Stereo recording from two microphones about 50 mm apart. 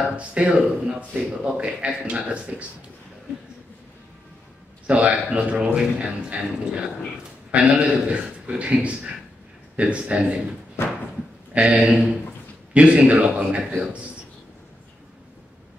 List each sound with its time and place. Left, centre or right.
0.1 s speech: right
4.8 s speech: right
11.5 s speech: right